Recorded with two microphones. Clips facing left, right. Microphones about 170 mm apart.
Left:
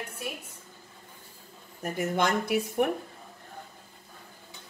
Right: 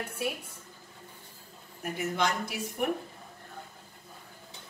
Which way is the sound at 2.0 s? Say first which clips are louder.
Left 3 dB; 50° left (ahead or behind).